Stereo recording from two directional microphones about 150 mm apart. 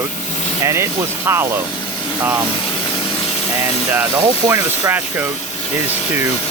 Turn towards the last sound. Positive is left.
turn(degrees=-15)  # may be behind; listen again after turning